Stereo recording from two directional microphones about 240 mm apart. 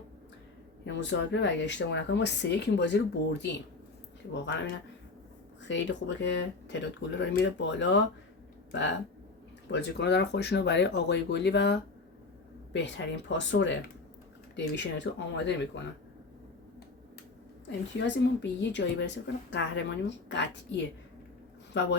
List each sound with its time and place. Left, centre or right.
0.9 s speech: left
5.6 s speech: left
9.7 s speech: left
17.7 s speech: left